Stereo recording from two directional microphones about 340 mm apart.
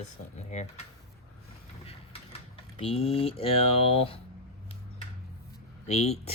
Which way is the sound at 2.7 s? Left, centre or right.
Centre.